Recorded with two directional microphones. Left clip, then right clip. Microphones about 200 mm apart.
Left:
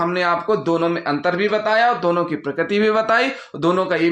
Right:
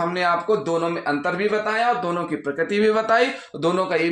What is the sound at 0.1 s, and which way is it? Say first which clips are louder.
Speech: left 2 dB; 35° left (ahead or behind).